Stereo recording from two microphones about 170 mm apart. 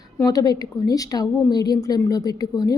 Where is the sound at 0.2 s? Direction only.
20° left (ahead or behind).